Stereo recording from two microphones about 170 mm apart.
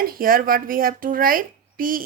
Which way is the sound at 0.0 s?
60° right (ahead or behind).